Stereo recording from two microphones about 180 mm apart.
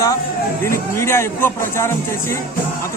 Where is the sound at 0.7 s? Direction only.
15° left (ahead or behind).